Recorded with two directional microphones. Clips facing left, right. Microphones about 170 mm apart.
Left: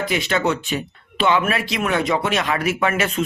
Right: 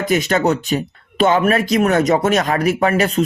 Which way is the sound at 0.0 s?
40° right (ahead or behind).